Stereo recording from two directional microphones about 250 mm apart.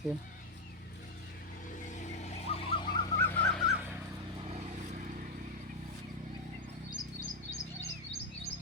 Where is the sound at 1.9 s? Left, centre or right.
Left; by 4.0 s centre.